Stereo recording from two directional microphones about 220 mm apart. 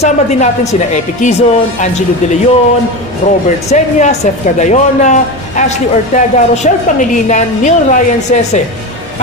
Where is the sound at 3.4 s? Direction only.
35° left (ahead or behind).